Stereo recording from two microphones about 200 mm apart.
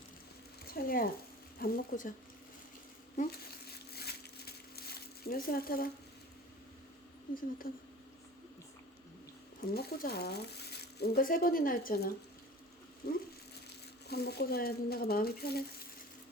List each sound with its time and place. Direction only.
0.7 s speech: 50° left (ahead or behind)
3.2 s crumpling: 50° left (ahead or behind)
7.3 s speech: 40° left (ahead or behind)
9.6 s speech: 50° left (ahead or behind)
14.1 s speech: 55° left (ahead or behind)